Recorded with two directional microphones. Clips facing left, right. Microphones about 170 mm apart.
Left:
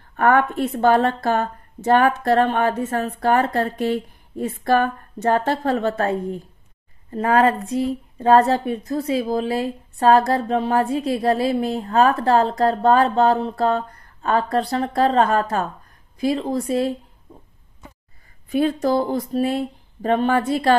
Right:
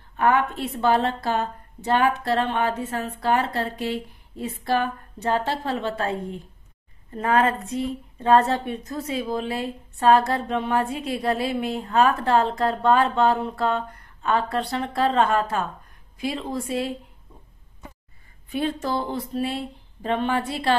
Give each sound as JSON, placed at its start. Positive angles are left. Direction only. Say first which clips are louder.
{"t": 0.1, "sound": "a woman's voice", "louder": "left 4 dB", "side_deg": 50}
{"t": 18.5, "sound": "a woman's voice", "louder": "left 7 dB", "side_deg": 40}